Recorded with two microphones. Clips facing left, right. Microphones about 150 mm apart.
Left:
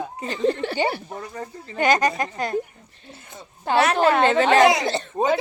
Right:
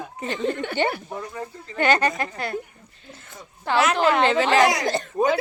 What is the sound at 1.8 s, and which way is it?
Speech, 15° left (ahead or behind).